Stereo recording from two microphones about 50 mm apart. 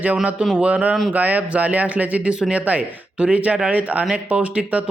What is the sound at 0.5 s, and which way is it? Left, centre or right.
Speech, right.